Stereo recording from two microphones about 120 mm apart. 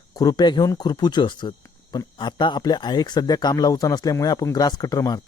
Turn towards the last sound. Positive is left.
turn(degrees=30)  # may be behind; listen again after turning